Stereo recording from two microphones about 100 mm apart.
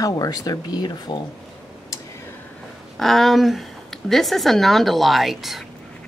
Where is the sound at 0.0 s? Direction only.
35° left (ahead or behind).